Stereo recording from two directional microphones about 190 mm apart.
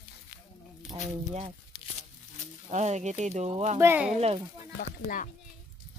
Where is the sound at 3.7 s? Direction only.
10° right (ahead or behind).